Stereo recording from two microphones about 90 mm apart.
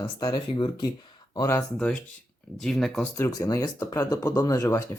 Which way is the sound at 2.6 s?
5° left (ahead or behind).